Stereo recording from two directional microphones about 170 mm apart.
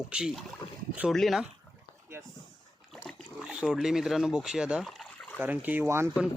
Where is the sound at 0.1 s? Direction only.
5° right (ahead or behind).